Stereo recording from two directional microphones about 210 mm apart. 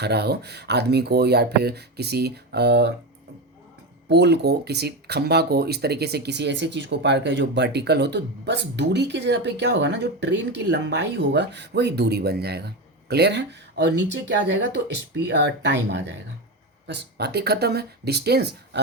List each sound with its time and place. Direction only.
0.0 s speech: 50° right (ahead or behind)
4.1 s speech: 55° right (ahead or behind)